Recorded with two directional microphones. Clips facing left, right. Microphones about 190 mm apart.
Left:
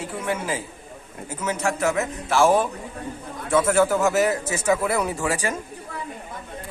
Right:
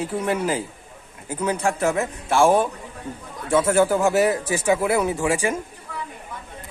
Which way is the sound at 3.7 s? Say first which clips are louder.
Right 2 dB; 30° right (ahead or behind).